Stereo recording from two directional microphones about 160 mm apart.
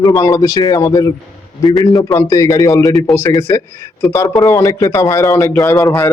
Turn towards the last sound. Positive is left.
turn(degrees=20)  # may be behind; listen again after turning